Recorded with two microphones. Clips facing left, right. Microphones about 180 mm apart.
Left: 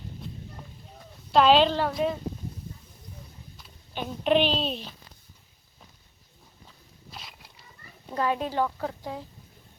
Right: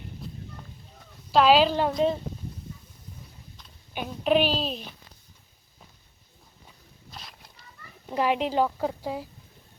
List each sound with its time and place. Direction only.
1.3 s a woman's voice: 5° right (ahead or behind)
2.0 s speech: 25° right (ahead or behind)
3.9 s a woman's voice: 5° right (ahead or behind)
7.1 s a sound: centre (ahead or behind)
8.1 s a woman's voice: 20° right (ahead or behind)